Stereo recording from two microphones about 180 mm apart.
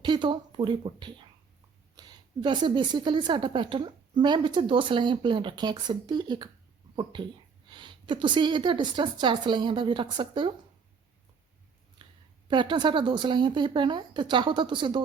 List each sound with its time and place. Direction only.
0.0 s a woman's voice: 25° right (ahead or behind)
12.0 s a sound: 25° right (ahead or behind)
12.5 s a woman's voice: 25° right (ahead or behind)